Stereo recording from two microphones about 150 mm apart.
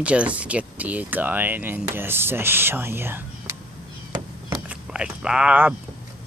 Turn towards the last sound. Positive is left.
turn(degrees=-10)  # may be behind; listen again after turning